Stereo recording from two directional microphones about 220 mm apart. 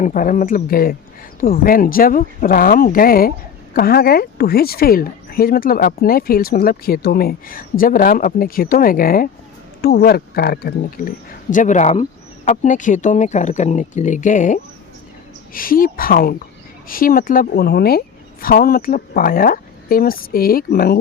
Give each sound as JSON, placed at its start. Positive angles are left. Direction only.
{"t": 0.0, "sound": "speech", "side_deg": 35}